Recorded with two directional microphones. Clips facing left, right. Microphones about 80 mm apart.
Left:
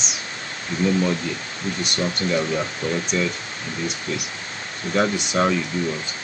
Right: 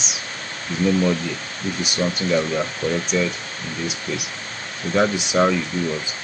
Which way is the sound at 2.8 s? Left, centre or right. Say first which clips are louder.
Right 2 dB; left.